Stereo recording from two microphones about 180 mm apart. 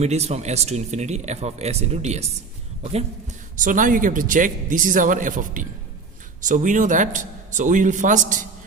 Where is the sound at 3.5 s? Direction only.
45° right (ahead or behind).